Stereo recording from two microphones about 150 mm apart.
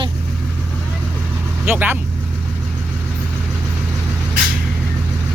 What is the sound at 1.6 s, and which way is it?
Speech, 15° right (ahead or behind).